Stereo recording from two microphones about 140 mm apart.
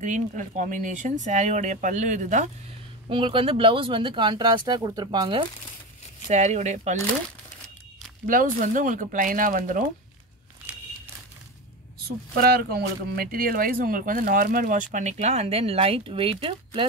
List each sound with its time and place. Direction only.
0.0 s speech: 60° right (ahead or behind)
3.1 s speech: 40° right (ahead or behind)
6.2 s speech: 55° right (ahead or behind)
8.3 s speech: 75° right (ahead or behind)
12.4 s speech: 90° right; by 16.8 s 40° right (ahead or behind)